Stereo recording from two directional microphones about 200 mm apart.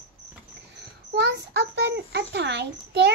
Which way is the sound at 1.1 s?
55° right (ahead or behind).